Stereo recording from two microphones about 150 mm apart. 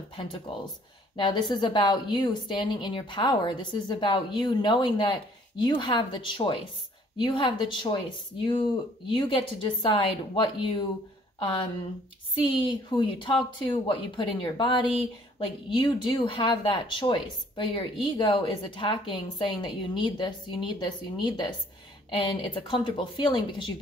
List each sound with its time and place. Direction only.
0.1 s speech: 35° left (ahead or behind)
9.1 s speech: 35° left (ahead or behind)